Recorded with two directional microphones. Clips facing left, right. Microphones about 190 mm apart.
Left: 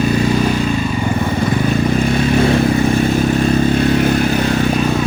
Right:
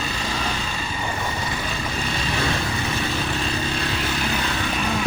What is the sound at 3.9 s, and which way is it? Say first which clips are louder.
Vehicle: left 12 dB; 50° left (ahead or behind).